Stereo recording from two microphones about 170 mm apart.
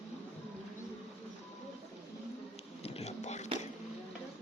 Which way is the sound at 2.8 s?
35° left (ahead or behind).